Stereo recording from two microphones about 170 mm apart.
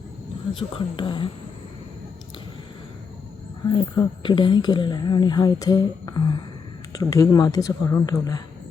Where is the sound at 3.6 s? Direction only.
25° left (ahead or behind).